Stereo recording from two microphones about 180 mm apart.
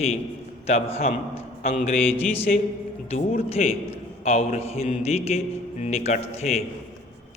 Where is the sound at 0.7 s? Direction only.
35° left (ahead or behind).